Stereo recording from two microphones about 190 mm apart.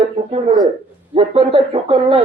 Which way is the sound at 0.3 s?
35° right (ahead or behind).